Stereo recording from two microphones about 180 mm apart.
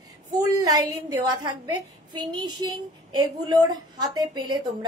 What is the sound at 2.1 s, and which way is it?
A woman's voice, 25° right (ahead or behind).